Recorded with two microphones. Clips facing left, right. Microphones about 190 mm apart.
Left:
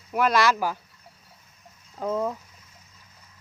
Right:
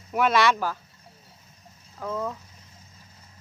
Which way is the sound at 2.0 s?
25° left (ahead or behind).